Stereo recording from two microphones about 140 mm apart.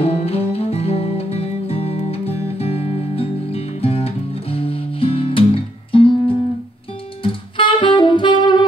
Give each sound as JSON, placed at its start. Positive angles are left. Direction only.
{"t": 0.0, "sound": "music", "side_deg": 45}
{"t": 7.2, "sound": "saxophone", "side_deg": 35}